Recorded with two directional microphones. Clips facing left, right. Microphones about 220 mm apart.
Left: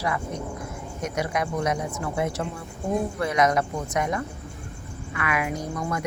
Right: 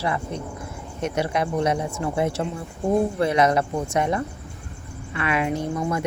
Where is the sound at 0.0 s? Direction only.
30° right (ahead or behind).